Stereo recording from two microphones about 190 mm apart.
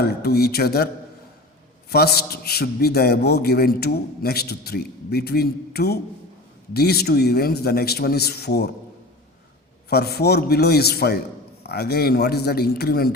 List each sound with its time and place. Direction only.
0.0 s a man's voice: 55° left (ahead or behind)
1.9 s a man's voice: 55° left (ahead or behind)
9.9 s a man's voice: 55° left (ahead or behind)